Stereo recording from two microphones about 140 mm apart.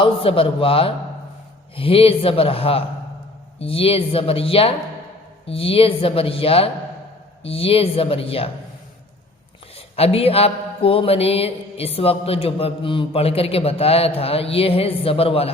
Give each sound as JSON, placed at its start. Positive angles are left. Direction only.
{"t": 0.0, "sound": "a man's voice", "side_deg": 40}
{"t": 9.7, "sound": "a man's voice", "side_deg": 45}